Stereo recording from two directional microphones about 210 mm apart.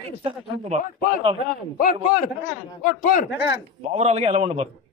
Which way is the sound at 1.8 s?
40° left (ahead or behind).